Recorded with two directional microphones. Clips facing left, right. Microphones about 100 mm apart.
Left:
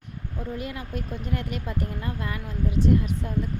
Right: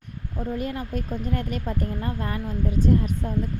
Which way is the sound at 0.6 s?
40° right (ahead or behind).